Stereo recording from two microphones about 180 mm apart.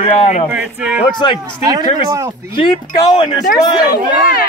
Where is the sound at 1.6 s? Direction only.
20° right (ahead or behind).